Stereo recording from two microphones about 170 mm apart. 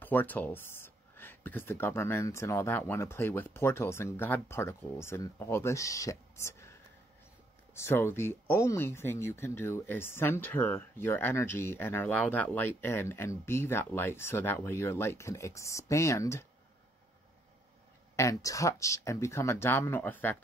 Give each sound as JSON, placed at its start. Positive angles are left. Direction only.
{"t": 0.0, "sound": "speech", "side_deg": 10}
{"t": 18.1, "sound": "speech", "side_deg": 20}